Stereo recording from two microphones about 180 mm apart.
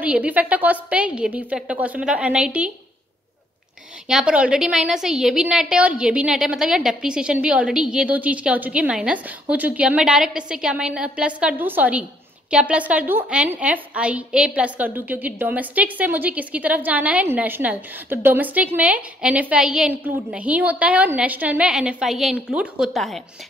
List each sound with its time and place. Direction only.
0.0 s a woman's voice: 5° right (ahead or behind)
4.1 s a woman's voice: 5° right (ahead or behind)